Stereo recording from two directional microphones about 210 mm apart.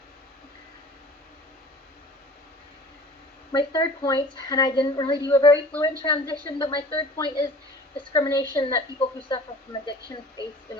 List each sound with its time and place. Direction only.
3.5 s a woman's voice: 20° left (ahead or behind)